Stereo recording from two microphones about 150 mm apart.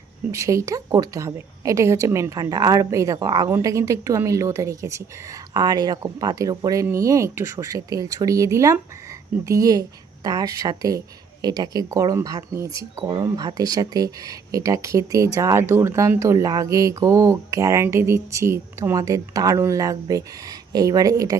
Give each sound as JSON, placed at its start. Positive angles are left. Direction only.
{"t": 0.3, "sound": "speech", "side_deg": -20}